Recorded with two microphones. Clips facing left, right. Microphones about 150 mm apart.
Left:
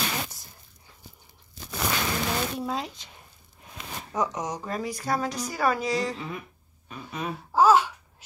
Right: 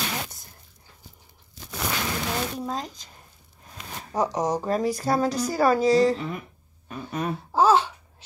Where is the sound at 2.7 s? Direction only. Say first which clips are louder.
Even; 40° right (ahead or behind).